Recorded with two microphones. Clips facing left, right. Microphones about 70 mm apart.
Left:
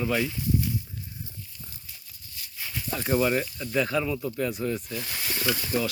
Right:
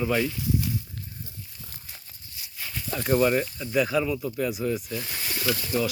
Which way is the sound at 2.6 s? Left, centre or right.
Centre.